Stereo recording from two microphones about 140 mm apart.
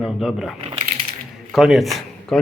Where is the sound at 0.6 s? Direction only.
40° right (ahead or behind).